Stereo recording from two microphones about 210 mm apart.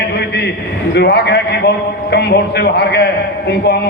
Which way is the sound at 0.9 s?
50° left (ahead or behind).